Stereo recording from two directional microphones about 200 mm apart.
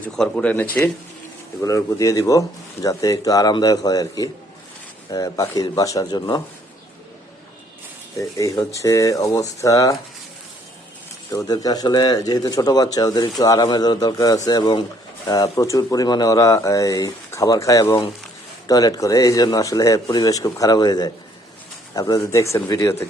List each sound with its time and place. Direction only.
0.0 s speech: 5° left (ahead or behind)
8.1 s speech: 15° left (ahead or behind)
11.3 s speech: 15° left (ahead or behind)